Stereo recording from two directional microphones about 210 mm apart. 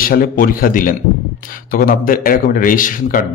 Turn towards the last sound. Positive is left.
turn(degrees=40)  # may be behind; listen again after turning